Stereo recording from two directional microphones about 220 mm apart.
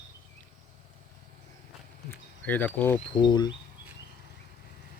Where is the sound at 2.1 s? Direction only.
10° left (ahead or behind).